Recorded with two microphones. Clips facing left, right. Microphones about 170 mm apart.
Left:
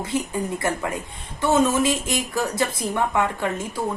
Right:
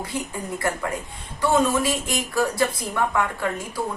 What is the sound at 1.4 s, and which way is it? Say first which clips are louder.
Speech: left 1 dB; 20° left (ahead or behind).